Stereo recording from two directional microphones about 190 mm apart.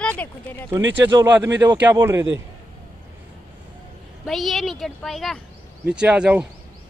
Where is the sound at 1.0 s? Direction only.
15° right (ahead or behind).